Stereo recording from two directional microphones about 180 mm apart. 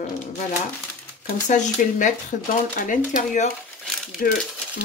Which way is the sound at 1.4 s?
45° left (ahead or behind).